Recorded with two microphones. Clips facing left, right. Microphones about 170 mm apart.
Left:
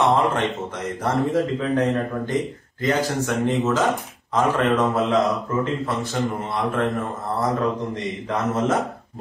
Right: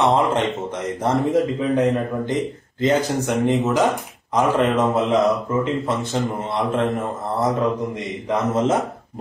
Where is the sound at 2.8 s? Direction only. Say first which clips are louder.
Right 3 dB; 20° right (ahead or behind).